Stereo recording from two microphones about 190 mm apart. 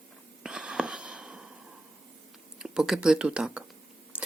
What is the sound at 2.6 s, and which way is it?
Speech, 5° right (ahead or behind).